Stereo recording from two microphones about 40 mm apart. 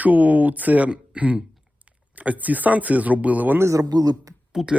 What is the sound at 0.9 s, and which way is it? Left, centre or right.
Speech, right.